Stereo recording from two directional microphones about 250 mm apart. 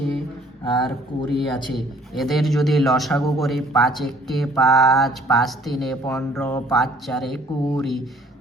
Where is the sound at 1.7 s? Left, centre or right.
Centre.